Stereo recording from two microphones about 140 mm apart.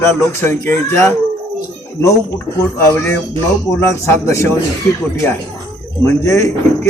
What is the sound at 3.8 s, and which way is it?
Speech, 20° left (ahead or behind).